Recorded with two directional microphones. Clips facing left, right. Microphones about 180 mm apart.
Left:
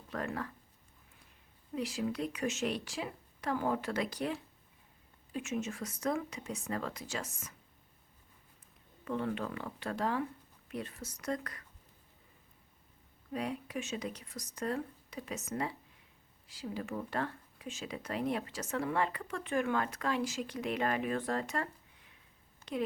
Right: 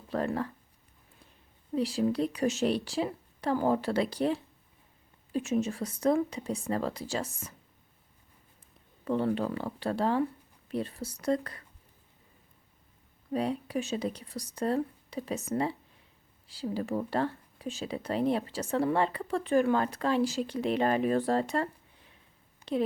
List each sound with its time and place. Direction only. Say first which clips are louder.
0.1 s speech: right 7 dB; 30° right (ahead or behind)
1.7 s speech: right 7 dB; 30° right (ahead or behind)
9.0 s speech: right 7 dB; 35° right (ahead or behind)
13.3 s speech: right 7 dB; 30° right (ahead or behind)